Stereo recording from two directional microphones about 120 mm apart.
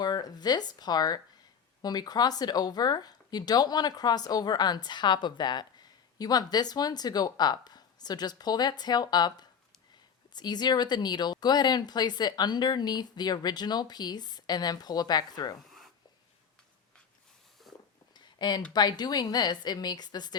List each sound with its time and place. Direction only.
0.0 s speech: 35° left (ahead or behind)
17.6 s a sound: centre (ahead or behind)
18.3 s speech: 35° left (ahead or behind)